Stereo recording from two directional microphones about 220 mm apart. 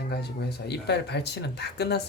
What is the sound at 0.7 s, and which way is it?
Speech, 50° left (ahead or behind).